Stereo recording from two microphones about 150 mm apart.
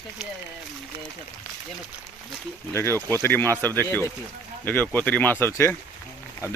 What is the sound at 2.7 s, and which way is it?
Speech, 15° left (ahead or behind).